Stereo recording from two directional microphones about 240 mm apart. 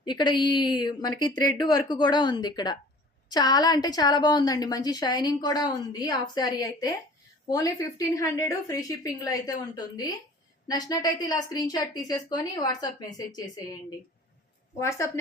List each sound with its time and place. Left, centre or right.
0.0 s a woman's voice: centre
14.8 s a woman's voice: centre